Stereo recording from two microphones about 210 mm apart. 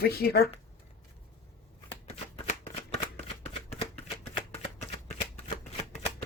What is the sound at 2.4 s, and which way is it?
Shuffling cards, 30° left (ahead or behind).